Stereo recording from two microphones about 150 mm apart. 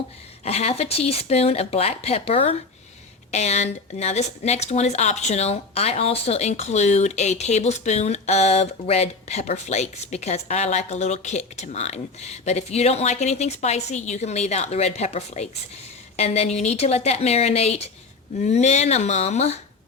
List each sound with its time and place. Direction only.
0.4 s a woman's voice: 45° left (ahead or behind)